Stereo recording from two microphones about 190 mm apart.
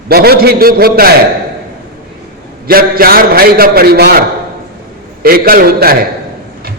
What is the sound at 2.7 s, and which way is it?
A man's voice, 50° right (ahead or behind).